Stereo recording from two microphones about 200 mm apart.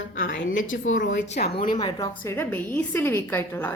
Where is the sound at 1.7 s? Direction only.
20° left (ahead or behind).